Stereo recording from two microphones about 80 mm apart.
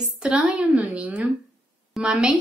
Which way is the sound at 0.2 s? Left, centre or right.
Centre.